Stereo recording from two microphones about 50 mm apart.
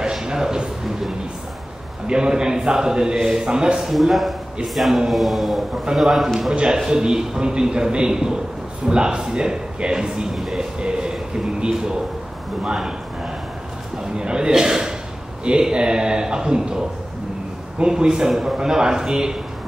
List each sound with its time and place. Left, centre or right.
0.0 s a man's voice: centre
3.9 s mantra: centre
6.5 s a man's voice: centre